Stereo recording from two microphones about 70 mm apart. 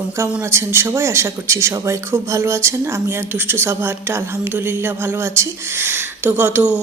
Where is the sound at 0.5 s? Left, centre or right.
Right.